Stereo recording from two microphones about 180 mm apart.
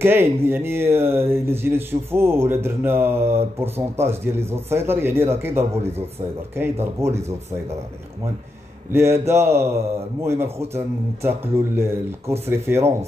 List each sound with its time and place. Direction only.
0.0 s speech: 10° right (ahead or behind)
8.9 s speech: 15° right (ahead or behind)